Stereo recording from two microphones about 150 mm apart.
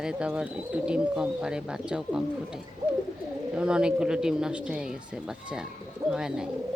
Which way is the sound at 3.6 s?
5° right (ahead or behind).